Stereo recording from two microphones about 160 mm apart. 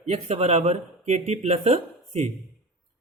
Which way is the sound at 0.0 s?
40° right (ahead or behind).